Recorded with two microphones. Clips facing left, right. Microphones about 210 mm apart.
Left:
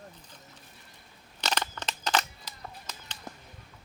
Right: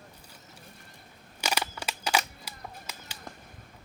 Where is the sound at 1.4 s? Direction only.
10° right (ahead or behind).